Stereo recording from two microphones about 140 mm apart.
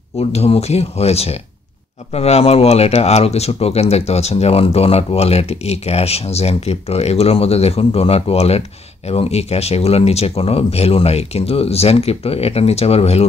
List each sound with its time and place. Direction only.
0.2 s speech: 45° left (ahead or behind)